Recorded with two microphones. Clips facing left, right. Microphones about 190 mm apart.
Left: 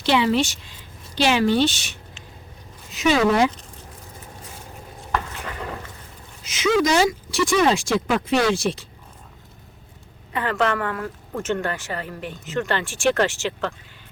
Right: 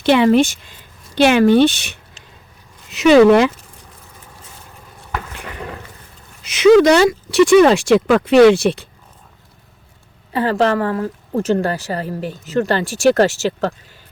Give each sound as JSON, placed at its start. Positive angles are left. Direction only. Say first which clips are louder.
{"t": 0.0, "sound": "speech", "louder": "right 7 dB", "side_deg": -55}
{"t": 2.9, "sound": "speech", "louder": "right 10 dB", "side_deg": -70}
{"t": 6.4, "sound": "speech", "louder": "right 11 dB", "side_deg": -65}
{"t": 10.3, "sound": "speech", "louder": "right 7 dB", "side_deg": -35}